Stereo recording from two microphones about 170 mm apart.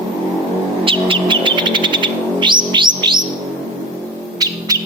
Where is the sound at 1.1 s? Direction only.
30° right (ahead or behind).